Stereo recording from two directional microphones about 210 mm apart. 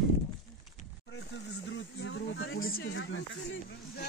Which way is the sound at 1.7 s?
60° left (ahead or behind).